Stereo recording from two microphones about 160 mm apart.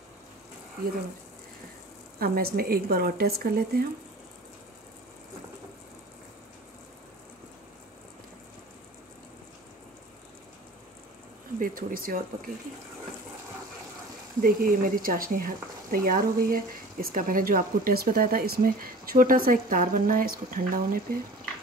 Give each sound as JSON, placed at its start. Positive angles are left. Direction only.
{"t": 2.1, "sound": "a woman's voice", "side_deg": -70}
{"t": 11.6, "sound": "speech", "side_deg": -60}
{"t": 14.4, "sound": "speech", "side_deg": -60}